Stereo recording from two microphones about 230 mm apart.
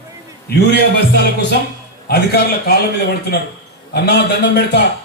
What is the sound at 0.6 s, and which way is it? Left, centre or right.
Speech, left.